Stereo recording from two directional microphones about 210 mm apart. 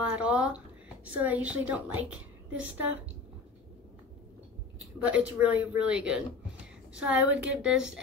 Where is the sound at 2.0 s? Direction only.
75° right (ahead or behind).